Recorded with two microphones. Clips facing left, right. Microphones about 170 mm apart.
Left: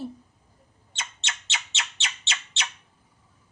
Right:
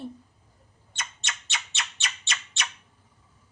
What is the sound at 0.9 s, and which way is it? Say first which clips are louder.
Squawk: even; 25° left (ahead or behind).